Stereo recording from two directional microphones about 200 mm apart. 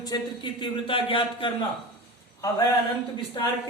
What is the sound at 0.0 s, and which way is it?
A man's voice, 20° left (ahead or behind).